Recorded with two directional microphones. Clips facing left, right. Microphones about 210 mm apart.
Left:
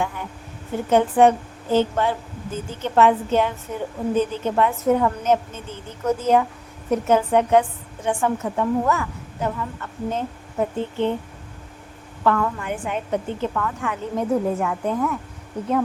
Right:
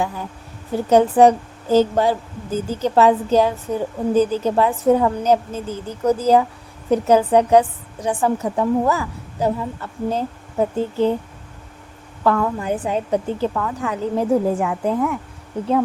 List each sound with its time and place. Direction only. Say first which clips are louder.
0.0 s a woman's voice: right 2 dB; 35° right (ahead or behind)
12.2 s a woman's voice: right 2 dB; 30° right (ahead or behind)